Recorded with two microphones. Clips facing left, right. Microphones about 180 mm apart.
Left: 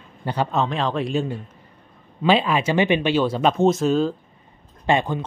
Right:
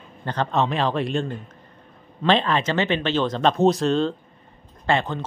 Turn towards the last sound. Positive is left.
turn(degrees=15)  # may be behind; listen again after turning